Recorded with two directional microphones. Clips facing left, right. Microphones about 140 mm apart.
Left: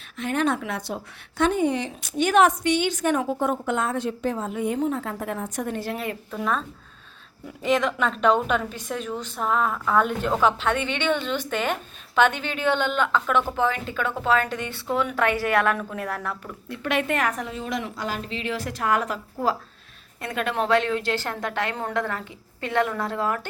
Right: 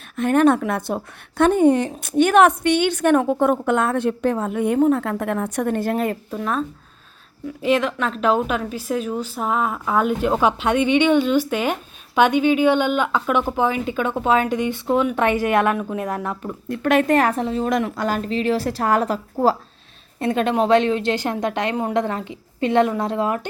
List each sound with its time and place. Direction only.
0.2 s speech: 50° right (ahead or behind)
6.3 s a woman's voice: 5° right (ahead or behind); by 16.5 s 25° right (ahead or behind)
16.5 s a woman's voice: 45° right (ahead or behind); by 17.6 s 30° right (ahead or behind)
17.6 s a woman's voice: 50° right (ahead or behind); by 23.5 s 20° right (ahead or behind)